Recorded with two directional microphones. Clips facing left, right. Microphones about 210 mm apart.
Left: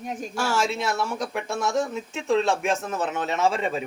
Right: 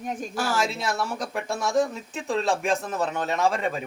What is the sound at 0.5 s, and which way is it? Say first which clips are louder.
Speech: left 3 dB; centre (ahead or behind).